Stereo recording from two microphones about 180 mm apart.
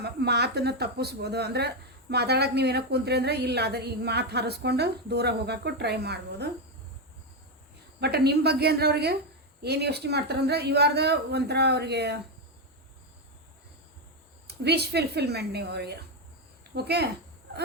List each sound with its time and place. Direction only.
0.0 s speech: 65° right (ahead or behind)
8.0 s speech: 65° right (ahead or behind)
14.4 s speech: 65° right (ahead or behind)